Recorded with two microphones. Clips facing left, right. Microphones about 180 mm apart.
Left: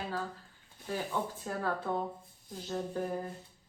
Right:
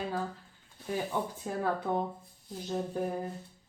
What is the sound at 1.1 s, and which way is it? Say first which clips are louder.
Speech: even; 15° right (ahead or behind).